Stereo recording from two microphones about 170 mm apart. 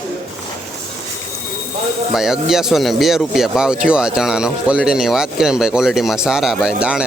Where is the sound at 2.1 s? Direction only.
Centre (ahead or behind).